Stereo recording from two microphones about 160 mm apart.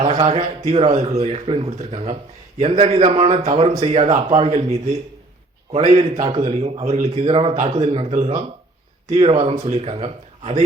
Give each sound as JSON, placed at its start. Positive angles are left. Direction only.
{"t": 0.0, "sound": "a man's voice", "side_deg": -40}